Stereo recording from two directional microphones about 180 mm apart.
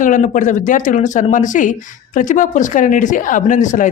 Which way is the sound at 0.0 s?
45° left (ahead or behind).